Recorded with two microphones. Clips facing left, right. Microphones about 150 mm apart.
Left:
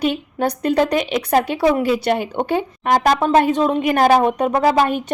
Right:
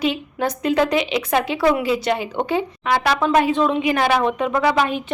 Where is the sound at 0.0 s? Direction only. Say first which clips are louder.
Left 2 dB; 50° left (ahead or behind).